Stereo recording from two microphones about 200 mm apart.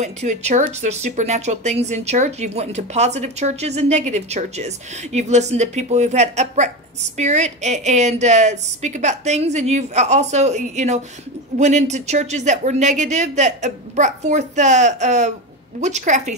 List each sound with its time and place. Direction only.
0.0 s speech: 35° right (ahead or behind)